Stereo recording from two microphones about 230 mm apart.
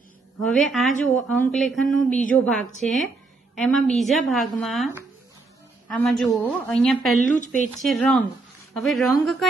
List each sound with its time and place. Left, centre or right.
0.4 s a woman's voice: centre
7.2 s speech: left
7.8 s a woman's voice: centre